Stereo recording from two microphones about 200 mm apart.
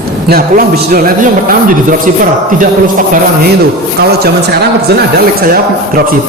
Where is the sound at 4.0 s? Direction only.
55° right (ahead or behind).